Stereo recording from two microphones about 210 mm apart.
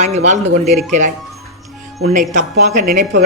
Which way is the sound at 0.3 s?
30° right (ahead or behind).